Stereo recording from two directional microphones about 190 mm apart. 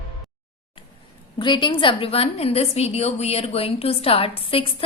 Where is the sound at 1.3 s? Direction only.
25° left (ahead or behind).